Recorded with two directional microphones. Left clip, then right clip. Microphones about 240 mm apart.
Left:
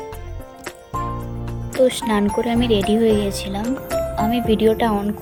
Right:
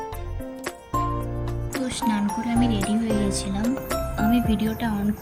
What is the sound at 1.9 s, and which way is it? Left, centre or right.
Speech, centre.